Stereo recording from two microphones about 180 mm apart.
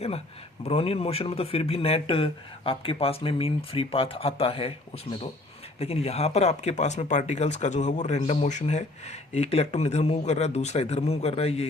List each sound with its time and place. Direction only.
0.6 s speech: 35° left (ahead or behind)
5.8 s speech: 35° left (ahead or behind)